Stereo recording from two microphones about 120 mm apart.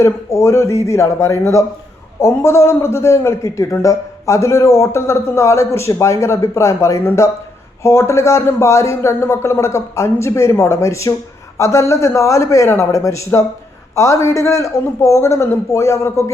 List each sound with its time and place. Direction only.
0.0 s a man's voice: 25° left (ahead or behind)